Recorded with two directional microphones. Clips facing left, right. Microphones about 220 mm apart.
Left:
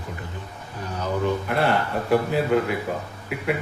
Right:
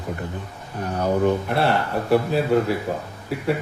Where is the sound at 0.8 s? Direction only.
60° right (ahead or behind).